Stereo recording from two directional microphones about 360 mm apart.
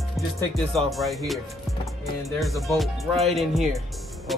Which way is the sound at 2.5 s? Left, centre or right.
Centre.